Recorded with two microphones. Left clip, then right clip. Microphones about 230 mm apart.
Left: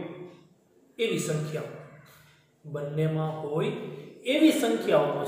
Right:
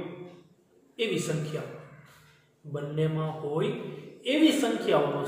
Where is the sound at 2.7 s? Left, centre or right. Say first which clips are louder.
Left 1 dB; centre.